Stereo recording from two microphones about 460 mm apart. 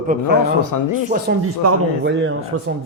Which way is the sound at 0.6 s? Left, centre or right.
Left.